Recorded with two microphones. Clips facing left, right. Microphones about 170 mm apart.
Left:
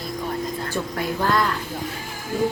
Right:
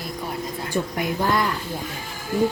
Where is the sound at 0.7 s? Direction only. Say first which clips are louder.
Right 1 dB; 15° right (ahead or behind).